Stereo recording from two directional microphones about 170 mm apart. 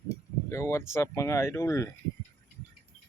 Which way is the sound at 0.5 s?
15° left (ahead or behind).